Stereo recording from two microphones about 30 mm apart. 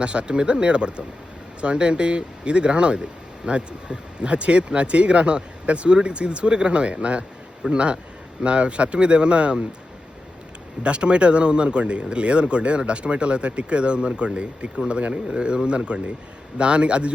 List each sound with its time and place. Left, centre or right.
0.0 s speech: right
10.8 s speech: right